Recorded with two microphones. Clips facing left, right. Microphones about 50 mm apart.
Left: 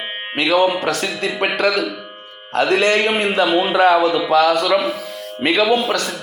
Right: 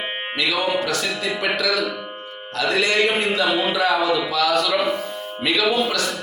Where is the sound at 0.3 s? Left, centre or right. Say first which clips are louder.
Left 6 dB; left.